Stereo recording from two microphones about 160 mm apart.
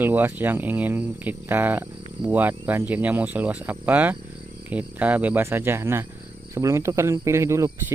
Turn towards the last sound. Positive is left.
turn(degrees=-20)  # may be behind; listen again after turning